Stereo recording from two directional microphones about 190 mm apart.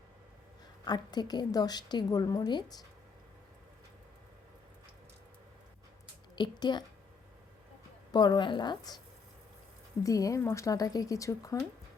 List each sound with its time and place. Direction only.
0.9 s a woman's voice: 20° left (ahead or behind)
6.3 s a woman's voice: 20° left (ahead or behind)
8.1 s a woman's voice: 20° left (ahead or behind)
10.0 s speech: 15° left (ahead or behind)